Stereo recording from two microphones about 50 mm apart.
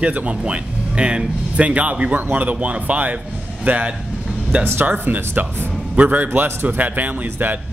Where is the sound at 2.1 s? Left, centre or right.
Right.